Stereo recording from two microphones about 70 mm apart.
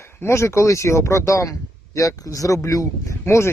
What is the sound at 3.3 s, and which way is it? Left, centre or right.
Speech, left.